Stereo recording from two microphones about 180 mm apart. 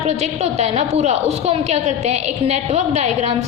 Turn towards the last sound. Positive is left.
turn(degrees=-40)  # may be behind; listen again after turning